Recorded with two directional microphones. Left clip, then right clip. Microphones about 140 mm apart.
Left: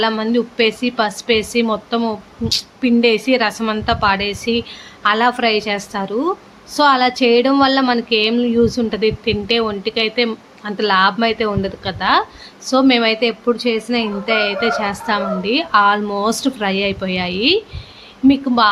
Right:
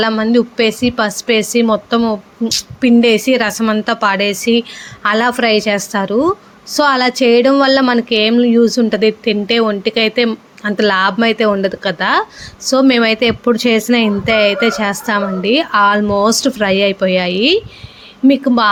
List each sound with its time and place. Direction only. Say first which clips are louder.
0.0 s a woman's voice: right 4 dB; 35° right (ahead or behind)